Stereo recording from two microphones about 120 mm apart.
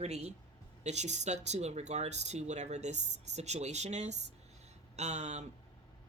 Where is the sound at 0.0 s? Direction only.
65° right (ahead or behind).